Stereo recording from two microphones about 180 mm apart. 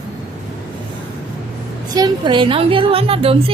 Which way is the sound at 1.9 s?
25° right (ahead or behind).